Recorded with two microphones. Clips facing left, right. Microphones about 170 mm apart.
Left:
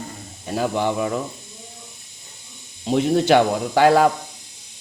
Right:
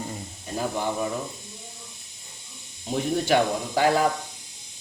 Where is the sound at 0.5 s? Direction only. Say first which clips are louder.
Left 6 dB; 90° left.